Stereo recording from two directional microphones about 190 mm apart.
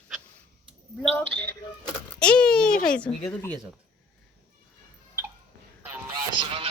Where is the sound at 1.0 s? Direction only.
10° left (ahead or behind).